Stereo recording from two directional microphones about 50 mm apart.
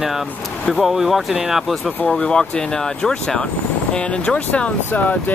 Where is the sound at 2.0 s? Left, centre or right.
Centre.